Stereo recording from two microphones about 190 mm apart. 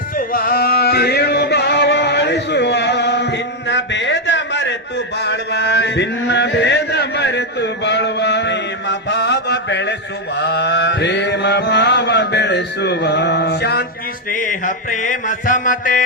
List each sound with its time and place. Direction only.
0.2 s music: 50° left (ahead or behind)
10.3 s mantra: 65° left (ahead or behind)
14.3 s mantra: 45° left (ahead or behind)